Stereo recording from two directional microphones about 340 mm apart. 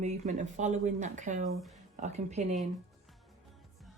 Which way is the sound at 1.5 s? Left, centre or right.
Centre.